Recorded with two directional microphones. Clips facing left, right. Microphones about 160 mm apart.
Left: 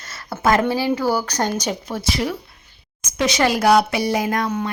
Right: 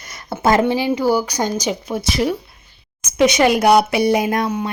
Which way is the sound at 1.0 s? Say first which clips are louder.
Right 3 dB; 15° right (ahead or behind).